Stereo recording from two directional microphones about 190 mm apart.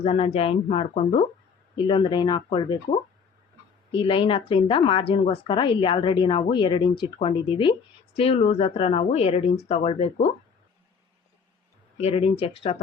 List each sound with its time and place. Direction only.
0.0 s speech: 30° left (ahead or behind)
3.9 s speech: 25° left (ahead or behind)
11.9 s speech: 30° left (ahead or behind)